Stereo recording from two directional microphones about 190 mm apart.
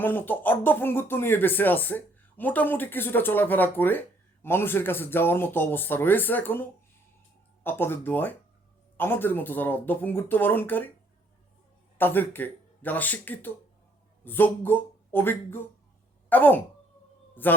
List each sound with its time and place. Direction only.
0.0 s speech: 10° left (ahead or behind)
11.9 s speech: 10° left (ahead or behind)